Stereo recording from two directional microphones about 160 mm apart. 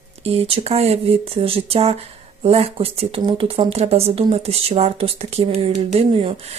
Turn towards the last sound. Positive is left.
turn(degrees=-35)  # may be behind; listen again after turning